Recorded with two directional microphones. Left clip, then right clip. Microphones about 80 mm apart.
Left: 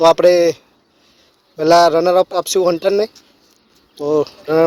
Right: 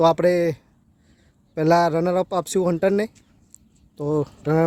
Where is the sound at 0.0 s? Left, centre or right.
Right.